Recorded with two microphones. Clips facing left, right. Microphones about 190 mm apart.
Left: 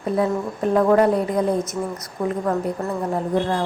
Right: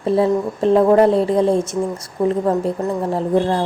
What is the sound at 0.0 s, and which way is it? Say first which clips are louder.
A woman's voice: right 5 dB; 25° right (ahead or behind).